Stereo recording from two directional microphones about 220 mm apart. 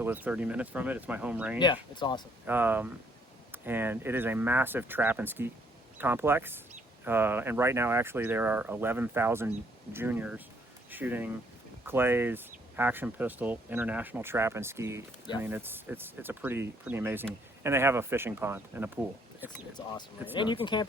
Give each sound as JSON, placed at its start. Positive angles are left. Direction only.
{"t": 0.0, "sound": "speech", "side_deg": -10}
{"t": 1.5, "sound": "speech", "side_deg": 20}
{"t": 2.5, "sound": "speech", "side_deg": -10}
{"t": 19.7, "sound": "speech", "side_deg": 20}